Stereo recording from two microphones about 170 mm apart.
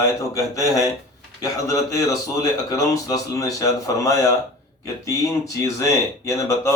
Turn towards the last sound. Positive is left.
turn(degrees=20)  # may be behind; listen again after turning